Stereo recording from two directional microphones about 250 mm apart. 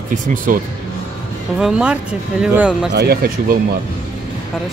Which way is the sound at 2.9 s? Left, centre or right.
Right.